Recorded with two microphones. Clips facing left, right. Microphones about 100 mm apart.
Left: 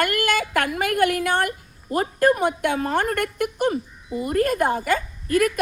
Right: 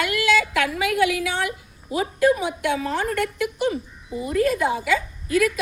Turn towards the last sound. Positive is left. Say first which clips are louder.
# left 1 dB
turn(degrees=50)  # may be behind; listen again after turning